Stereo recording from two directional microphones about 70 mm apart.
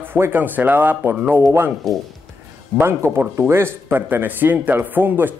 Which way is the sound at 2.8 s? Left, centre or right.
Right.